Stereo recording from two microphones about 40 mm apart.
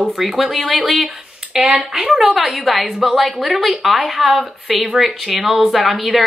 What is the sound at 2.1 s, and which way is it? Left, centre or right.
Speech, centre.